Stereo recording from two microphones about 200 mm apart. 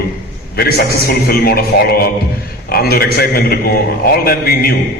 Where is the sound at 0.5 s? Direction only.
50° left (ahead or behind).